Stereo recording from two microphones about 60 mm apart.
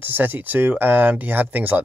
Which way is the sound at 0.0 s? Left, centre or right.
Right.